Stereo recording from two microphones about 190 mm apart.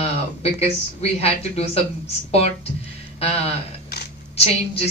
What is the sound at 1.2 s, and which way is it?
Speech, 35° left (ahead or behind).